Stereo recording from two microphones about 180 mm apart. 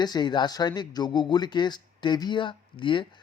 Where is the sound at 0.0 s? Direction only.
25° left (ahead or behind).